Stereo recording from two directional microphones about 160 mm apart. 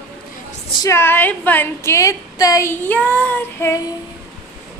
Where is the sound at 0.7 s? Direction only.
15° left (ahead or behind).